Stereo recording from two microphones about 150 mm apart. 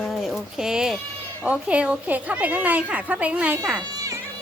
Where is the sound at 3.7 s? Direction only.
25° right (ahead or behind).